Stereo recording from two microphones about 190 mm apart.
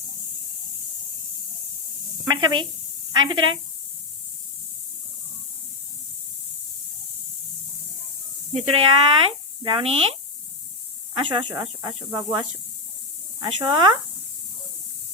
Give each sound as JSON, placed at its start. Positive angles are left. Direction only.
{"t": 2.2, "sound": "speech", "side_deg": -25}
{"t": 8.5, "sound": "speech", "side_deg": -30}